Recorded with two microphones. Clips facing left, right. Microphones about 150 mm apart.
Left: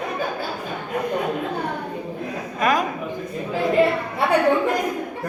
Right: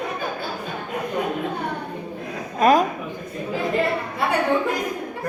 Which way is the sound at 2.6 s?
35° right (ahead or behind).